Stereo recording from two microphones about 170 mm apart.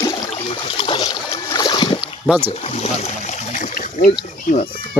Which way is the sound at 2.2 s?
10° right (ahead or behind).